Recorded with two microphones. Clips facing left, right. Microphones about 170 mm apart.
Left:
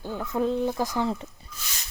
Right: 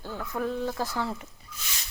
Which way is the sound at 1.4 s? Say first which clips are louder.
Left 1 dB; 30° left (ahead or behind).